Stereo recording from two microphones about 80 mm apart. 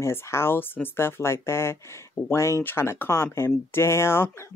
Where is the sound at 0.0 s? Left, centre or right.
Left.